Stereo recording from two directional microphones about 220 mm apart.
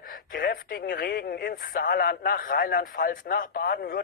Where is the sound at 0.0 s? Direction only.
40° left (ahead or behind).